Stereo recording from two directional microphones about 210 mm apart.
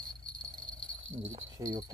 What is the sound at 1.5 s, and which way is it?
Speech, 15° right (ahead or behind).